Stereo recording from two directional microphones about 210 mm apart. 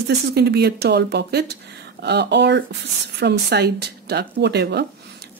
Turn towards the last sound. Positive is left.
turn(degrees=-50)  # may be behind; listen again after turning